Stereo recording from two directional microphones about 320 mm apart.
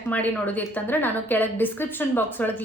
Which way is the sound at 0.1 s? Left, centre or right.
Centre.